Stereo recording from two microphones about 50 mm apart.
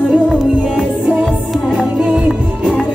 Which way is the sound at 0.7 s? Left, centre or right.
Right.